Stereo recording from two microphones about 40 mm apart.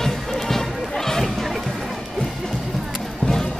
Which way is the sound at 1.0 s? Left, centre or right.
Centre.